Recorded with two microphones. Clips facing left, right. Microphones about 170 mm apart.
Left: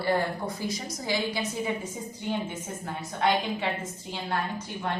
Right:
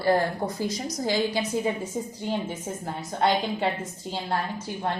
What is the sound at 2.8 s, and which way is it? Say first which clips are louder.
Speech: right 4 dB; 35° right (ahead or behind).